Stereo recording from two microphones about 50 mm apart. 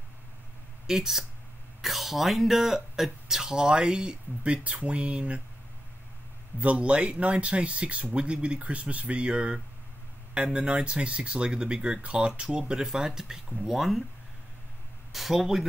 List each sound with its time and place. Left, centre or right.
0.8 s speech: centre; by 5.4 s right
6.6 s speech: right; by 14.0 s centre
15.1 s speech: centre